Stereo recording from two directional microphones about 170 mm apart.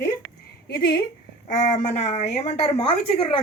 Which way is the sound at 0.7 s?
70° left (ahead or behind).